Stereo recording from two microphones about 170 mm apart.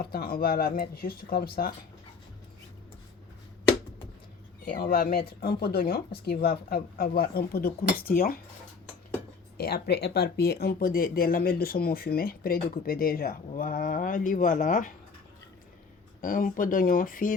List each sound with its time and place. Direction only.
0.0 s speech: 60° left (ahead or behind)
4.6 s speech: 60° left (ahead or behind)
9.6 s speech: 65° left (ahead or behind); by 14.9 s 50° left (ahead or behind)
16.2 s speech: 55° left (ahead or behind)